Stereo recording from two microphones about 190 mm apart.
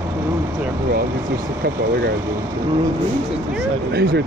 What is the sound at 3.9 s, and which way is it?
Speech, 60° right (ahead or behind).